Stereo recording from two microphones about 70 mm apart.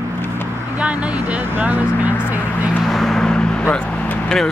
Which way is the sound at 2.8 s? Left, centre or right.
Centre.